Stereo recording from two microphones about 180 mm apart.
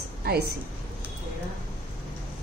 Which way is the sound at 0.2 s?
60° right (ahead or behind).